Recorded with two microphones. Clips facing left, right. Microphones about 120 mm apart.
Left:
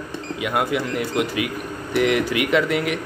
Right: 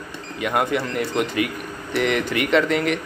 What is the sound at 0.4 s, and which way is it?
Speech, 5° left (ahead or behind).